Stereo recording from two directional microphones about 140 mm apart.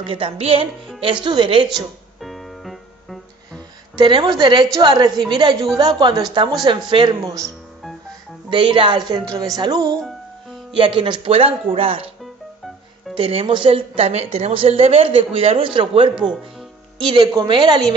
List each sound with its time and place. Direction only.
0.0 s a woman's voice: 45° right (ahead or behind)
2.1 s music: centre (ahead or behind)
4.0 s a woman's voice: 35° right (ahead or behind)
8.5 s a woman's voice: 35° right (ahead or behind)
13.1 s a woman's voice: 40° right (ahead or behind)